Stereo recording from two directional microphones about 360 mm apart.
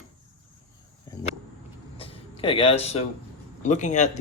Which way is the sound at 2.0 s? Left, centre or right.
Centre.